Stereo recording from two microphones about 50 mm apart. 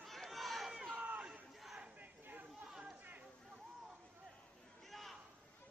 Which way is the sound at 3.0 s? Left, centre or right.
Right.